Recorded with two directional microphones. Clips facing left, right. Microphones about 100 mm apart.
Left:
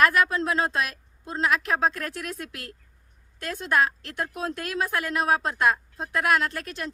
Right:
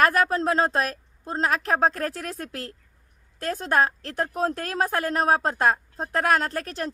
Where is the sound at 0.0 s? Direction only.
40° right (ahead or behind).